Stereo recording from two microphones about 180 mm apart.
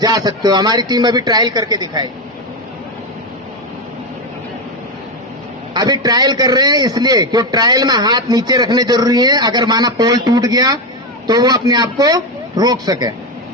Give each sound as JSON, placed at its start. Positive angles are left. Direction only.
{"t": 0.0, "sound": "a man's voice", "side_deg": -20}
{"t": 5.7, "sound": "a man's voice", "side_deg": -20}